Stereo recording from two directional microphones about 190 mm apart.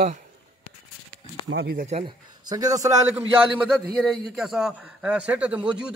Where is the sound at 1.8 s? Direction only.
30° right (ahead or behind).